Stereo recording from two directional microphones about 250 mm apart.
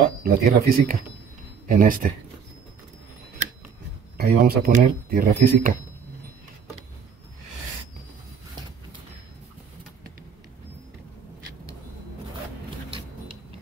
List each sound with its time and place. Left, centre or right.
0.2 s speech: right
4.2 s speech: right